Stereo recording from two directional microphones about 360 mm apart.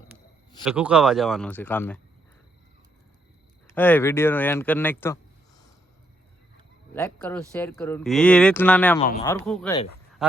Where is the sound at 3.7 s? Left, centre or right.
Centre.